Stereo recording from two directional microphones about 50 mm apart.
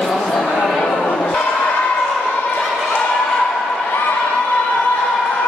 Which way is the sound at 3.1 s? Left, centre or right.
Centre.